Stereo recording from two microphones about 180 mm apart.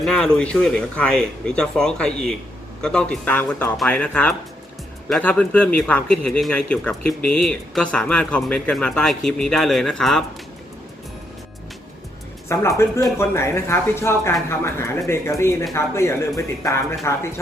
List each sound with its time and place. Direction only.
0.0 s a man's voice: 5° left (ahead or behind)
12.5 s speech: 15° left (ahead or behind)